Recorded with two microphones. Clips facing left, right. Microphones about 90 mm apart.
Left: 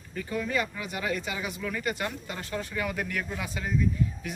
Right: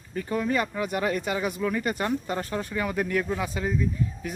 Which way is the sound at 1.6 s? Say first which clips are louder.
Right 3 dB; 35° right (ahead or behind).